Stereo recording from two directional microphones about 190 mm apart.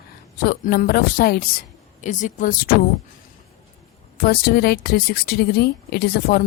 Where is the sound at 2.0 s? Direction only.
40° left (ahead or behind).